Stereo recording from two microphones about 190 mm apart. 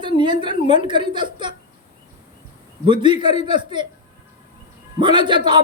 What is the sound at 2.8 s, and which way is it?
A woman's voice, 25° right (ahead or behind).